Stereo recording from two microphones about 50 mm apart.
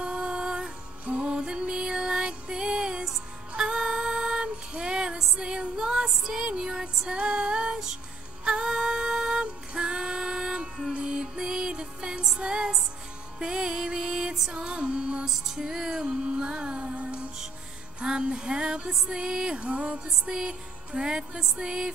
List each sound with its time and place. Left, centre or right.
0.0 s music: centre
3.1 s child singing: centre
7.2 s music: right
8.5 s female singing: centre
10.9 s music: centre
14.5 s music: right
15.2 s music: centre